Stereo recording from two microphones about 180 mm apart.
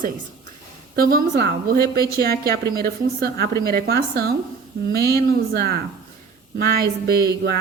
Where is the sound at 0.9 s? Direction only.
55° right (ahead or behind).